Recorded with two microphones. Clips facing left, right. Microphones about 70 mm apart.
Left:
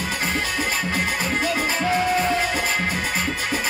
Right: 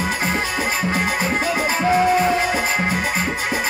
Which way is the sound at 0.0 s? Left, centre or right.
Right.